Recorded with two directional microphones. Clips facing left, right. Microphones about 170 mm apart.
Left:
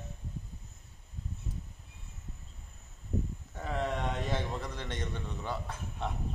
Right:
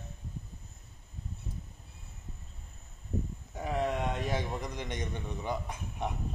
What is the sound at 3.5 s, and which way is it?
A man's voice, 15° right (ahead or behind).